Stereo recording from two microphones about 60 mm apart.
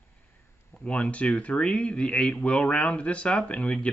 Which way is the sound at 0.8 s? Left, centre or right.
Left.